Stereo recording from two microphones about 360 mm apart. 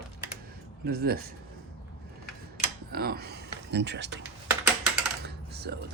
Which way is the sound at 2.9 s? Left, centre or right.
Right.